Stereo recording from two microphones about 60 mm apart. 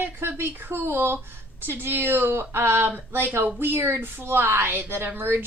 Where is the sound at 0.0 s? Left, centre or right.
Right.